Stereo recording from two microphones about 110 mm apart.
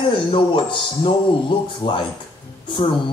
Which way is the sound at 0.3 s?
50° left (ahead or behind).